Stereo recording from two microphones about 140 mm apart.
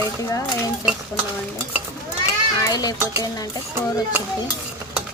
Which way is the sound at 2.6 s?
25° left (ahead or behind).